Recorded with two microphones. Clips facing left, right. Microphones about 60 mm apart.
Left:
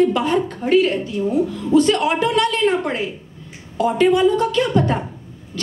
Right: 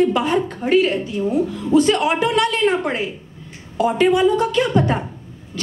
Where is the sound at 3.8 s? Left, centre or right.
Centre.